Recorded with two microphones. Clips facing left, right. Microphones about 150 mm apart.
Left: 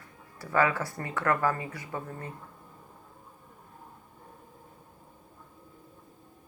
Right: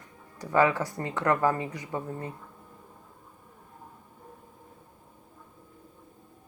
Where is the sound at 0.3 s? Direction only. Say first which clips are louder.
Right 3 dB; 15° right (ahead or behind).